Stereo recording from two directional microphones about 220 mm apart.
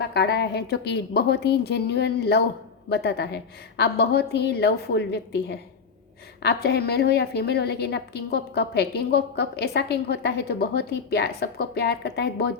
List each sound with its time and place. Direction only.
0.0 s a woman's voice: 50° left (ahead or behind)